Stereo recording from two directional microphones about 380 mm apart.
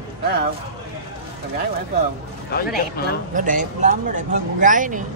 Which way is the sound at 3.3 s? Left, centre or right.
Centre.